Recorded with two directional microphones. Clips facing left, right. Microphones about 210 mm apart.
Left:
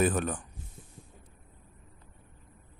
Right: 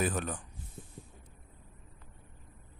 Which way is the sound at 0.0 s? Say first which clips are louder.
Left 5 dB; 50° left (ahead or behind).